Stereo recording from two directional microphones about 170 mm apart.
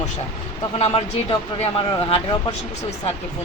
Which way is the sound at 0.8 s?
30° left (ahead or behind).